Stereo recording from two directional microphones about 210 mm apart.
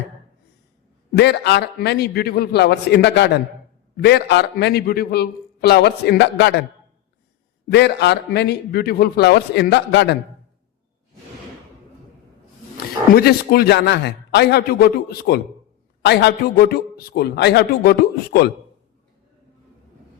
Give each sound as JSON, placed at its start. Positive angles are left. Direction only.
{"t": 1.1, "sound": "a man's voice", "side_deg": 55}
{"t": 7.7, "sound": "a man's voice", "side_deg": 50}
{"t": 12.7, "sound": "a man's voice", "side_deg": 50}